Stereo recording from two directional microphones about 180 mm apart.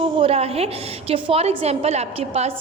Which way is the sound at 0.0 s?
30° right (ahead or behind).